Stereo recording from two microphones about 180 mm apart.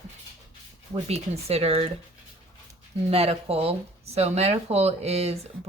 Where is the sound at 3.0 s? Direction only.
35° right (ahead or behind).